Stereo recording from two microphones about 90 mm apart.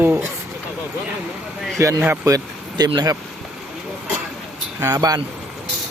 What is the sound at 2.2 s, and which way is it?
Speech, 45° right (ahead or behind).